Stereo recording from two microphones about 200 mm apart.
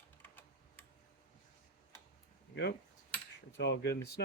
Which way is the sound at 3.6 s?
55° left (ahead or behind).